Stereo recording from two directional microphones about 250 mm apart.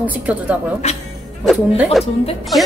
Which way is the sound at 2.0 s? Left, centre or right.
Centre.